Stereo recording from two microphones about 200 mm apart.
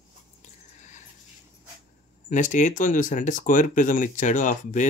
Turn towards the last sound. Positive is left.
turn(degrees=40)  # may be behind; listen again after turning